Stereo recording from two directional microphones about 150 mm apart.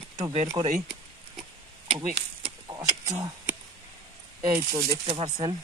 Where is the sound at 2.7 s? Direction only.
25° right (ahead or behind).